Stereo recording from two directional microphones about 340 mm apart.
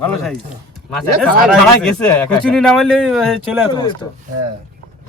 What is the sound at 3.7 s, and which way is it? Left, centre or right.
Speech, centre.